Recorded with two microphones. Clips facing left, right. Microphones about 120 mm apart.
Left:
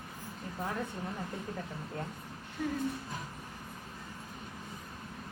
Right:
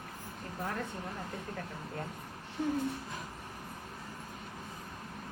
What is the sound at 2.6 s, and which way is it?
Speech, 25° right (ahead or behind).